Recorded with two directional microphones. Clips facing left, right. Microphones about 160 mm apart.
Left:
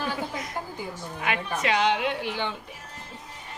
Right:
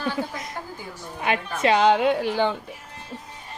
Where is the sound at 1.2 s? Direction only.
30° right (ahead or behind).